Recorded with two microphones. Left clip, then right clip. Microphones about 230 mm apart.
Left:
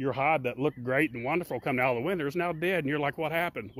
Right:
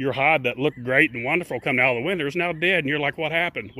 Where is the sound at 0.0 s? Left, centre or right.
Centre.